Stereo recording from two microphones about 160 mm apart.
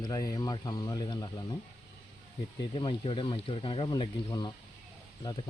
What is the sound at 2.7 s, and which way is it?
Speech, 30° left (ahead or behind).